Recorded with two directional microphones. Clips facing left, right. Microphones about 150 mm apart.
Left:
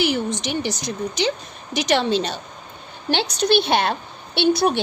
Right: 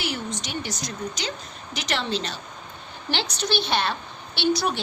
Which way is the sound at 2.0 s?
65° left (ahead or behind).